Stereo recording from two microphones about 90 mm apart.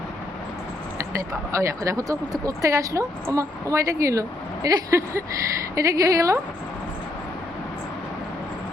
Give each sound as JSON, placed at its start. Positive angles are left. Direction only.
{"t": 0.9, "sound": "speech", "side_deg": -35}